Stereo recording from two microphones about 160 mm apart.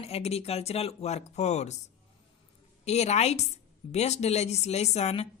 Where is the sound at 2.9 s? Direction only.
45° left (ahead or behind).